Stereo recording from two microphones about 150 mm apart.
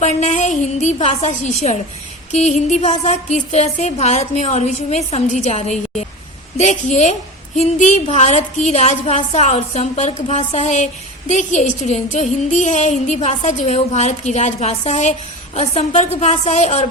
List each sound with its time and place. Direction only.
0.0 s a woman's voice: 50° left (ahead or behind)